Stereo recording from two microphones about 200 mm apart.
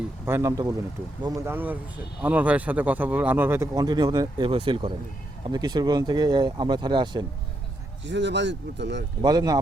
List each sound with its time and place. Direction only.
0.3 s speech: 15° right (ahead or behind)
8.0 s speech: 60° right (ahead or behind)
9.2 s speech: 20° right (ahead or behind)